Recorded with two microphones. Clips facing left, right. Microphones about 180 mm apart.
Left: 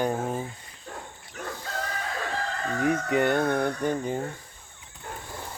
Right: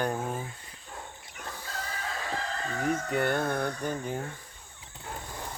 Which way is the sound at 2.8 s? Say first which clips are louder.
Left 5 dB; 65° left (ahead or behind).